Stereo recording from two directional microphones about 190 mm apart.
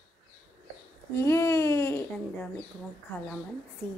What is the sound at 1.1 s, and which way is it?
Babbling, 15° left (ahead or behind).